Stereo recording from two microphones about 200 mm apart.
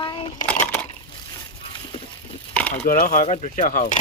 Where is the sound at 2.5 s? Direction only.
5° left (ahead or behind).